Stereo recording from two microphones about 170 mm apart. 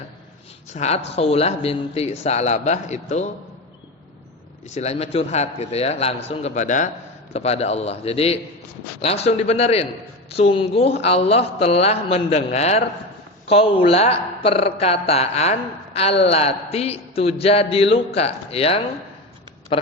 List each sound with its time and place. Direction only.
0.7 s speech: 40° left (ahead or behind)
4.7 s speech: 40° left (ahead or behind)